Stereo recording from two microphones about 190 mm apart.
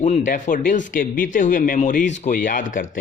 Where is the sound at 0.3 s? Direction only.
40° left (ahead or behind).